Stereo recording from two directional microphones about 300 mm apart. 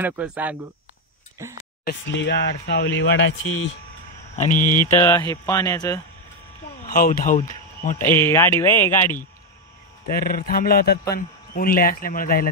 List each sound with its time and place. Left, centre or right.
0.0 s speech: centre
1.9 s speech: left
4.4 s a man's voice: left
4.9 s speech: centre
6.9 s a man's voice: left
8.0 s speech: centre
10.0 s a man's voice: left